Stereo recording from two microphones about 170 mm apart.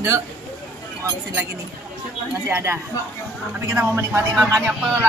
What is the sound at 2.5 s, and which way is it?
Speech, 15° right (ahead or behind).